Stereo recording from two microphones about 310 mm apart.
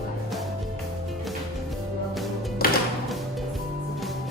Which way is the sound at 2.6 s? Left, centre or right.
Left.